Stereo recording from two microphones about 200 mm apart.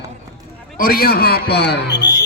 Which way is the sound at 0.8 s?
45° left (ahead or behind).